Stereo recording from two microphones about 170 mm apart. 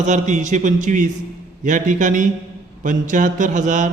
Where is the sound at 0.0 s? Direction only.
45° right (ahead or behind).